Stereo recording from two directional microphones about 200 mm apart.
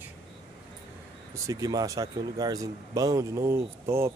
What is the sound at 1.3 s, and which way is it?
Speech, 15° right (ahead or behind).